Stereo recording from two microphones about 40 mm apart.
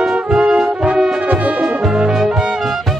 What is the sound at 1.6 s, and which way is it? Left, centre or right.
Music, centre.